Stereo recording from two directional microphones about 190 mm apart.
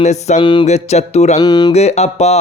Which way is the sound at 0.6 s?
35° left (ahead or behind).